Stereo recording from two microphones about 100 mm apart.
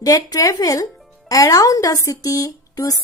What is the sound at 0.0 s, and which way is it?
A woman's voice, 35° left (ahead or behind).